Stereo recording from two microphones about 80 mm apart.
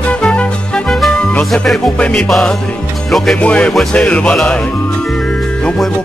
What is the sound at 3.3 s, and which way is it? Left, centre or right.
Speech, centre.